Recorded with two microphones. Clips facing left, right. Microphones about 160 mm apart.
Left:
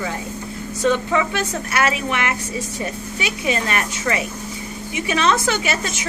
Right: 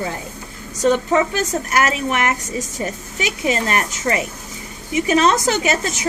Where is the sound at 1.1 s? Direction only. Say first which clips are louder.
Right 3 dB; 40° right (ahead or behind).